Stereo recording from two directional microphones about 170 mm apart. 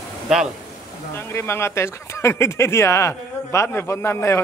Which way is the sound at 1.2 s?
15° left (ahead or behind).